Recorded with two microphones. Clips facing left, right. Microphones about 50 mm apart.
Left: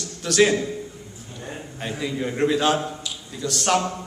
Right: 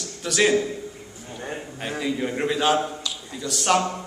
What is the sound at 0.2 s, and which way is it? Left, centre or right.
Speech, centre.